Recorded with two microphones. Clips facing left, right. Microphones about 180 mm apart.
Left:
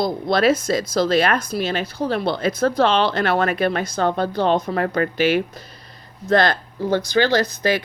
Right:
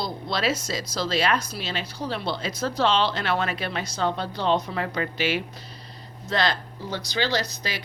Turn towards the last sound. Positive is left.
turn(degrees=55)  # may be behind; listen again after turning